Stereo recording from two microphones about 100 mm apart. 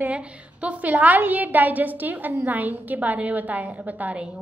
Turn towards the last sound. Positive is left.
turn(degrees=-15)  # may be behind; listen again after turning